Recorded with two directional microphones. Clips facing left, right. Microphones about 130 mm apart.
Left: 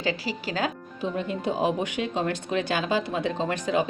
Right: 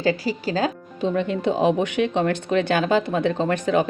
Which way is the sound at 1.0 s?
75° right (ahead or behind).